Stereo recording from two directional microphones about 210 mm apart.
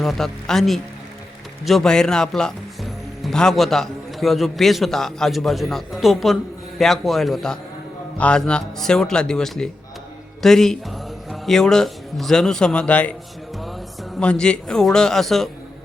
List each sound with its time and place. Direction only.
0.0 s a man's voice: centre (ahead or behind)
14.2 s a man's voice: 5° left (ahead or behind)